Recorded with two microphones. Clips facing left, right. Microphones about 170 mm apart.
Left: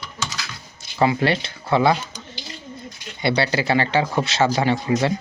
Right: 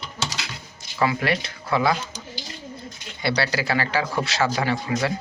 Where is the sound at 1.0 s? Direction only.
30° left (ahead or behind).